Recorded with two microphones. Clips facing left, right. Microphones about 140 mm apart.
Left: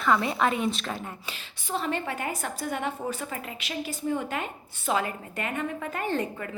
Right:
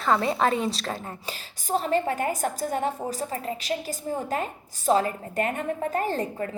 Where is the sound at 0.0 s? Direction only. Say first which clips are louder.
Right 1 dB; 35° right (ahead or behind).